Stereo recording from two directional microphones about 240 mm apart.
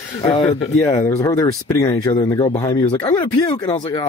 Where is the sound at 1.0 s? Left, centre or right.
Centre.